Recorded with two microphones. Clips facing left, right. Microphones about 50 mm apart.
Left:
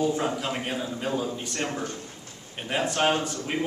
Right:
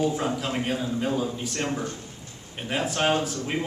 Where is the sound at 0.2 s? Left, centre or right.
Centre.